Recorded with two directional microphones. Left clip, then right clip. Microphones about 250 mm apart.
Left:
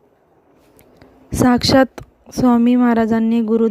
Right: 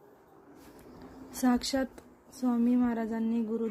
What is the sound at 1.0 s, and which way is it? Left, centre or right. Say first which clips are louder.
A woman's voice: left 15 dB; left.